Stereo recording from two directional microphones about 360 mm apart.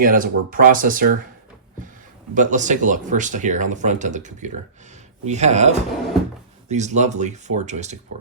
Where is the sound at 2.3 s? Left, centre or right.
Right.